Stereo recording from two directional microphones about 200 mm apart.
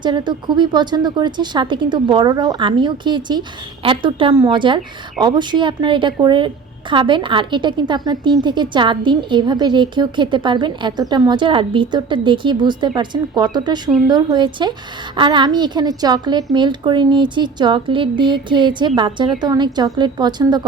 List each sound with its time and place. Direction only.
0.0 s a woman's voice: 20° right (ahead or behind)